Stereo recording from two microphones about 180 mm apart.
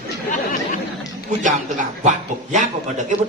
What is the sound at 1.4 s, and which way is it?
A man's voice, 45° right (ahead or behind).